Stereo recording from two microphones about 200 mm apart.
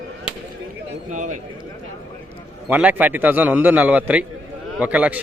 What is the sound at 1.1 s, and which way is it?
Speech, 40° right (ahead or behind).